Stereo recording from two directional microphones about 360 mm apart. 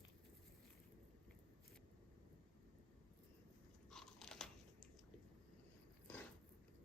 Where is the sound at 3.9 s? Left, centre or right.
Centre.